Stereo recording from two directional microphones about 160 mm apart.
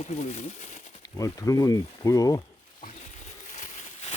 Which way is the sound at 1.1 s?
20° left (ahead or behind).